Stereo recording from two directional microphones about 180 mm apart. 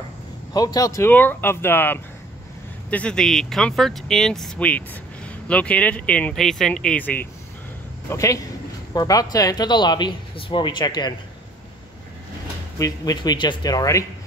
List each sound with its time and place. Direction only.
0.5 s speech: 20° left (ahead or behind)
12.7 s speech: 20° left (ahead or behind)